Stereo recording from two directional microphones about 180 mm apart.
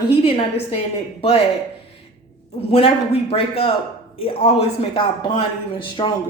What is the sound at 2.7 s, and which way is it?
A man's voice, 35° left (ahead or behind).